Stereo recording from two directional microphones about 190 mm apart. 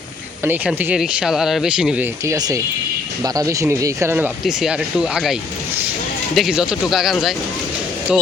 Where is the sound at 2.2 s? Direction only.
20° right (ahead or behind); by 7.3 s centre (ahead or behind).